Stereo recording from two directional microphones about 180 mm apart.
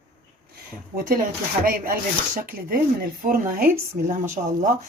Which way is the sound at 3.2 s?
50° right (ahead or behind).